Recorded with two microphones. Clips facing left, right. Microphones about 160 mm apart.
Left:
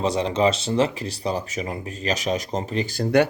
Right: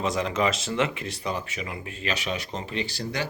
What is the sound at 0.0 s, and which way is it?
Speech, 30° left (ahead or behind).